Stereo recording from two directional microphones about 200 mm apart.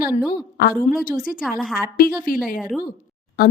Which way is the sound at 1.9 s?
45° left (ahead or behind).